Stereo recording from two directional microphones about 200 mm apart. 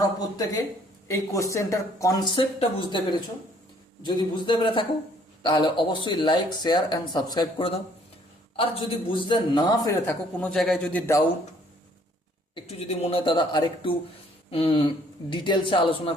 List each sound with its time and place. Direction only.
0.2 s speech: 20° left (ahead or behind)
9.1 s speech: 25° left (ahead or behind)
12.6 s speech: 30° left (ahead or behind)